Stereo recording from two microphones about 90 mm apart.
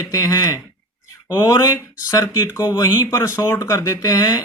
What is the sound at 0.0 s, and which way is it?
Speech, 35° left (ahead or behind).